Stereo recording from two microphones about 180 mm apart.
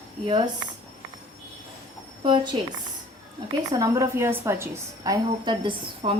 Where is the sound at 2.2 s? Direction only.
25° right (ahead or behind).